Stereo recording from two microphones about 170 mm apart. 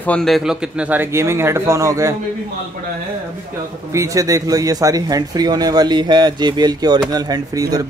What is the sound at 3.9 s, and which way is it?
Speech, 20° right (ahead or behind).